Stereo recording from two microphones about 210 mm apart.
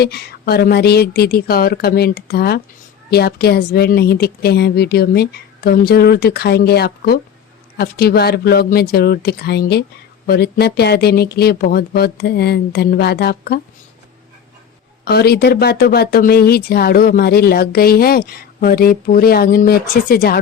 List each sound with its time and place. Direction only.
0.0 s speech: 50° left (ahead or behind)
15.0 s speech: 50° left (ahead or behind)